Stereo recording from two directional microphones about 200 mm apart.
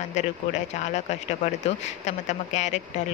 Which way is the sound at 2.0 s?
35° left (ahead or behind).